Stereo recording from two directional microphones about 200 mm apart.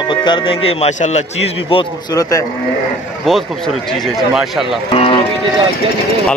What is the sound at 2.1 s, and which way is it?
Speech, 15° left (ahead or behind).